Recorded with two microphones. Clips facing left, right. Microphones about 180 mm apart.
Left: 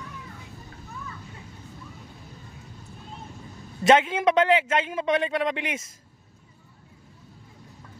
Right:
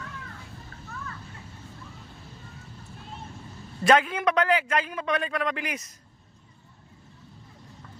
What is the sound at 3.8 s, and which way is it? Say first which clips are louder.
A man's voice: left 2 dB; 25° left (ahead or behind).